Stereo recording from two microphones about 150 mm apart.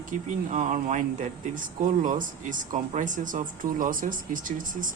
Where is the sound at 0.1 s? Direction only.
55° right (ahead or behind).